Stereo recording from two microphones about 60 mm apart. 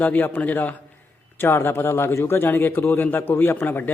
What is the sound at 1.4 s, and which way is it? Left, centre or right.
A man's voice, left.